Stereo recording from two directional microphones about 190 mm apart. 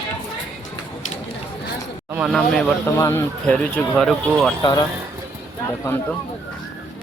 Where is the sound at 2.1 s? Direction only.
Centre (ahead or behind).